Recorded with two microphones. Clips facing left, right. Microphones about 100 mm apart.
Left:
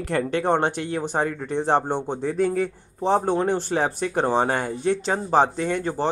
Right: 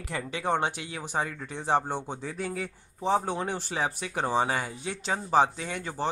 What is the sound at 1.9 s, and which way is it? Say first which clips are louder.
Speech: left 7 dB; 20° left (ahead or behind).